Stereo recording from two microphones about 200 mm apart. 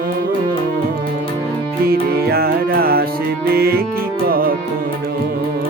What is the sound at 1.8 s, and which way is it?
Music, 50° right (ahead or behind).